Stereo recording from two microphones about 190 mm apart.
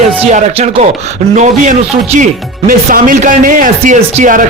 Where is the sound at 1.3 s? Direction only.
40° right (ahead or behind).